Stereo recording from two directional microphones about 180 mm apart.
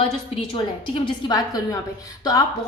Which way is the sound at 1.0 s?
20° left (ahead or behind).